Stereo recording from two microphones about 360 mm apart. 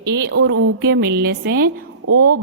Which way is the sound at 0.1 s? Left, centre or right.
Right.